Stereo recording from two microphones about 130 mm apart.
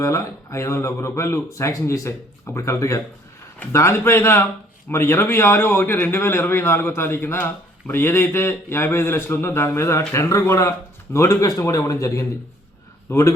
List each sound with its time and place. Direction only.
0.0 s a man's voice: 20° left (ahead or behind)